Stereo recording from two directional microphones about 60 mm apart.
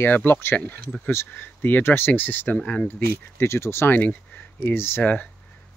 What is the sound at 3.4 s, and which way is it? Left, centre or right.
Speech, left.